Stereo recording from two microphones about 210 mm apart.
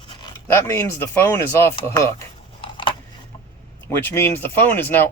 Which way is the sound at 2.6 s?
25° left (ahead or behind).